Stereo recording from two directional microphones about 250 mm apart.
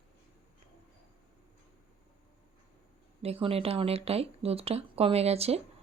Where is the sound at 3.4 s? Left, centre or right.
Right.